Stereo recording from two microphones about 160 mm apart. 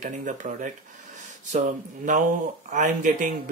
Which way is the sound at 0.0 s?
50° right (ahead or behind).